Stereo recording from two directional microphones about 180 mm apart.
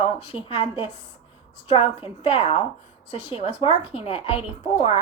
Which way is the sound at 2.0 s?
30° left (ahead or behind).